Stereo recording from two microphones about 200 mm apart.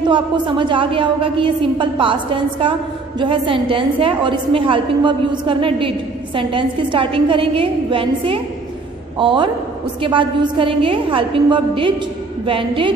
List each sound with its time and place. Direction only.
0.1 s a woman's voice: 25° right (ahead or behind)